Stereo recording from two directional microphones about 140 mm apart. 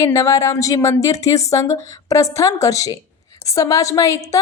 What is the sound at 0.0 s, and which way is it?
A woman's voice, 20° left (ahead or behind).